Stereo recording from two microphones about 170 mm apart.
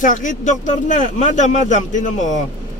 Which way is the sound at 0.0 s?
50° left (ahead or behind).